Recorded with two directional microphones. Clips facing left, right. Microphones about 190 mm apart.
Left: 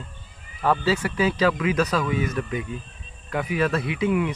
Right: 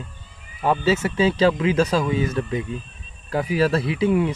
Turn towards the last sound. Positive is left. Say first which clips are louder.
# right 3 dB
turn(degrees=-30)  # may be behind; listen again after turning